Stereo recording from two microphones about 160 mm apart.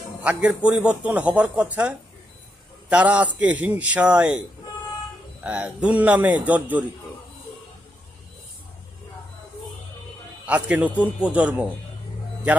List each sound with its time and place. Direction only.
0.2 s a man's voice: 5° right (ahead or behind)
2.9 s a man's voice: 10° right (ahead or behind)
5.4 s a man's voice: 5° right (ahead or behind)
10.4 s a man's voice: 10° right (ahead or behind)